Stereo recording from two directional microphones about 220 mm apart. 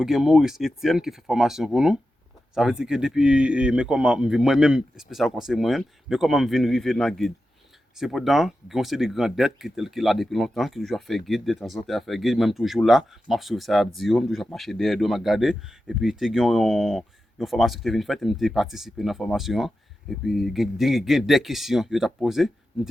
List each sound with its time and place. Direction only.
0.0 s speech: centre (ahead or behind)